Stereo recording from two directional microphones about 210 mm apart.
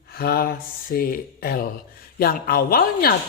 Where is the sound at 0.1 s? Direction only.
45° left (ahead or behind).